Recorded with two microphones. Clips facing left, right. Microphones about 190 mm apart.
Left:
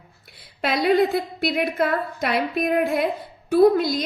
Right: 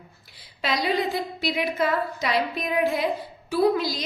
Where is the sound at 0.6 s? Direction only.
55° left (ahead or behind).